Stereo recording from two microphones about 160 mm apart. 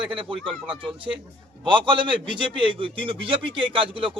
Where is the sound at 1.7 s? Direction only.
30° right (ahead or behind).